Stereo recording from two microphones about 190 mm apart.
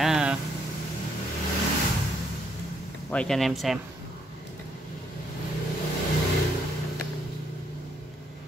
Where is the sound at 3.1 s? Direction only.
5° left (ahead or behind).